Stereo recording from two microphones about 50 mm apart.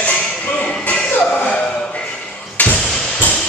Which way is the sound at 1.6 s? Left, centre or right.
Left.